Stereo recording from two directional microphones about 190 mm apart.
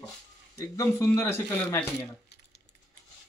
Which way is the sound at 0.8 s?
15° left (ahead or behind).